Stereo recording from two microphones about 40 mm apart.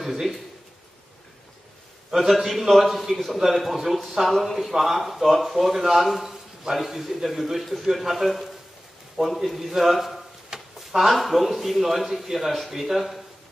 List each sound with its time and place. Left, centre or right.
0.0 s a man's voice: centre
2.0 s a man's voice: centre